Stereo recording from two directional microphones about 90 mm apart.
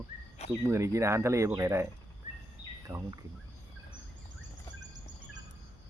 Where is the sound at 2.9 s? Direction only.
30° right (ahead or behind).